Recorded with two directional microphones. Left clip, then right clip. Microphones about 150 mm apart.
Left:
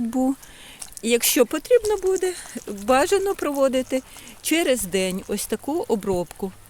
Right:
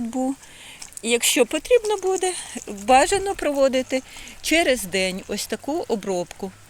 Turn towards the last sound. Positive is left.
turn(degrees=50)  # may be behind; listen again after turning